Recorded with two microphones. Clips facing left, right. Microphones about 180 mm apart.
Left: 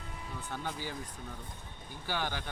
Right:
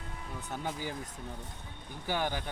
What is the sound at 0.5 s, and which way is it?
Speech, 20° right (ahead or behind).